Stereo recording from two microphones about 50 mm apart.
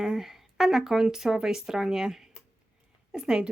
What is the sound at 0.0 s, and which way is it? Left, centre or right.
Speech, centre.